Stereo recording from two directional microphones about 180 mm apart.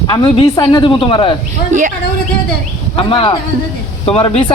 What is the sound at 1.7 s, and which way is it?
Speech, 45° right (ahead or behind).